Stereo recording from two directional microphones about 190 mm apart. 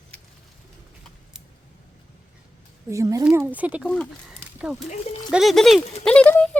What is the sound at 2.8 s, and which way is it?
Speech, 15° right (ahead or behind).